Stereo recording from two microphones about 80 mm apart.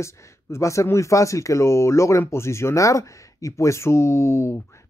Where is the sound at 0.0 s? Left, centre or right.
Left.